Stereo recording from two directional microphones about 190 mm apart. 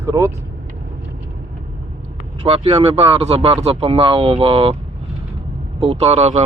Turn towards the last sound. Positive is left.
turn(degrees=-35)  # may be behind; listen again after turning